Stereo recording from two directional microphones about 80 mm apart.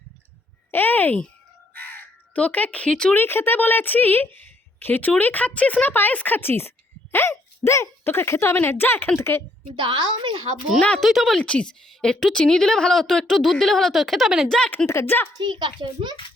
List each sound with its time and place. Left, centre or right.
0.7 s a sound: left
1.7 s crow: left
3.2 s a woman's voice: left
9.7 s a woman's voice: right
10.8 s a woman's voice: centre
11.0 s speech: centre
11.3 s a woman's voice: centre
14.4 s a woman's voice: centre
14.8 s speech: left
15.4 s a child's voice: right